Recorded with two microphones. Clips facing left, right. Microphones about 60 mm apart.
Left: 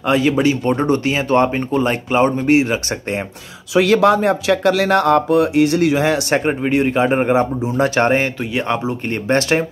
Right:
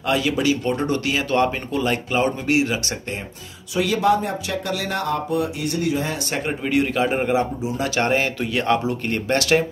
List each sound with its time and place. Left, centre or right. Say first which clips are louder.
0.0 s speech: left 5 dB; left
3.7 s speech: left 6 dB; left
6.6 s speech: left 4 dB; left
7.6 s speech: left 6 dB; left
8.4 s speech: even; centre